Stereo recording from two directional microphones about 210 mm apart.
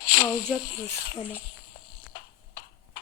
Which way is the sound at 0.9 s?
50° left (ahead or behind).